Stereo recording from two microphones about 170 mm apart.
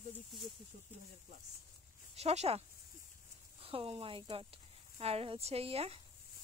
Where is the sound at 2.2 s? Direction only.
40° right (ahead or behind).